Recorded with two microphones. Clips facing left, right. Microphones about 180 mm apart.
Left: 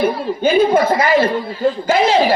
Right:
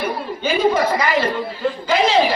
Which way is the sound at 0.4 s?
50° left (ahead or behind).